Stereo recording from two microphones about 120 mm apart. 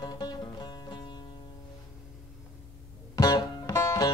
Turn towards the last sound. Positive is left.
turn(degrees=25)  # may be behind; listen again after turning